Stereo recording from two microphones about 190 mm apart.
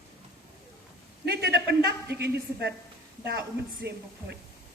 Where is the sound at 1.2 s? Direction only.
60° right (ahead or behind).